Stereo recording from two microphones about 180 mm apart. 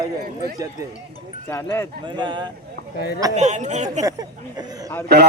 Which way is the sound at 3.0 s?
60° left (ahead or behind).